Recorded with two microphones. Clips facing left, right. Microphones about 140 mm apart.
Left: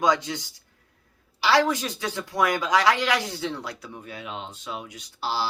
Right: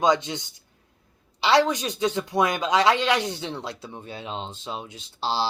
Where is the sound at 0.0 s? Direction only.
25° right (ahead or behind).